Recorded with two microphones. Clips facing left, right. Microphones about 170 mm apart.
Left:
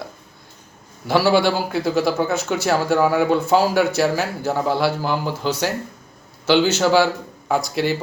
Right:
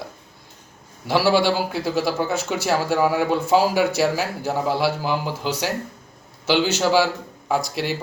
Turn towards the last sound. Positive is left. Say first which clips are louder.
# left 3 dB
turn(degrees=-5)  # may be behind; listen again after turning